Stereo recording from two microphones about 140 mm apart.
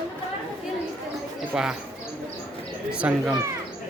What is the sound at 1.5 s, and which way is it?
Speech, 5° right (ahead or behind).